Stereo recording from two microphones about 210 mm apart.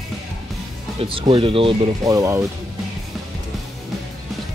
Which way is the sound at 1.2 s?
25° right (ahead or behind).